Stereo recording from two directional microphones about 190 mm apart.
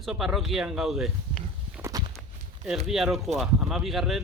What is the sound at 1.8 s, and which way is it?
Walk, 20° right (ahead or behind).